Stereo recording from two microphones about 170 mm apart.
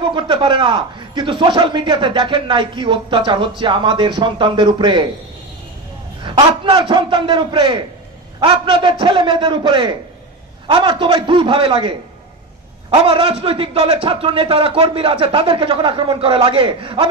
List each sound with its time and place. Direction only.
0.0 s a man's voice: 30° right (ahead or behind)
6.2 s a man's voice: 30° right (ahead or behind)